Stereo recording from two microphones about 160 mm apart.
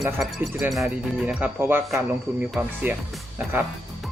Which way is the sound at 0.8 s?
10° right (ahead or behind).